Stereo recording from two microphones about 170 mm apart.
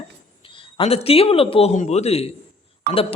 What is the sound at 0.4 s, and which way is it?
Speech, 30° left (ahead or behind).